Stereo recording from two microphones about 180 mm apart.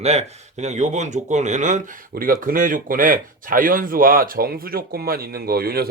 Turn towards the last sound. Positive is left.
turn(degrees=-60)  # may be behind; listen again after turning